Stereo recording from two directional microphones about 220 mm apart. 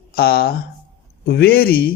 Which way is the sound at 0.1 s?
45° left (ahead or behind).